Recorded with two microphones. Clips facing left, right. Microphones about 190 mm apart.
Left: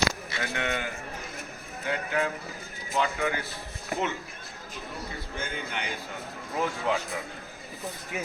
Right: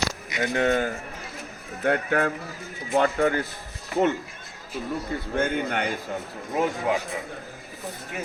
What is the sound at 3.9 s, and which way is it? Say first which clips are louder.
Speech: right 7 dB; 50° left (ahead or behind).